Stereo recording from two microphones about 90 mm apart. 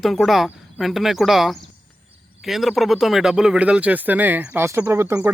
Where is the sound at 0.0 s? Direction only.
Centre (ahead or behind).